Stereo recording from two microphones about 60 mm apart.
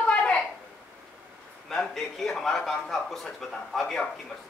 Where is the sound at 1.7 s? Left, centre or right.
Centre.